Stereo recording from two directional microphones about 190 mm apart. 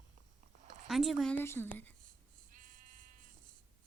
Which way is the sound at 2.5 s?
45° right (ahead or behind).